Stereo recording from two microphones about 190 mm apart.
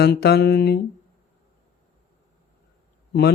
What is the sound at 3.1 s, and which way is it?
Speech, 60° left (ahead or behind).